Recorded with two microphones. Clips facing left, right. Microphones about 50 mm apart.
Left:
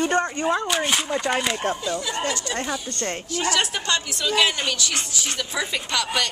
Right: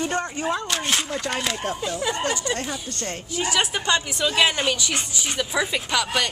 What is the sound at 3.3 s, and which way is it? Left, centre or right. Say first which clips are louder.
A woman's voice: right 1 dB; centre.